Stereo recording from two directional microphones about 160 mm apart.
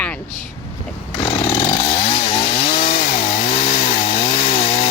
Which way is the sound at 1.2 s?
40° left (ahead or behind).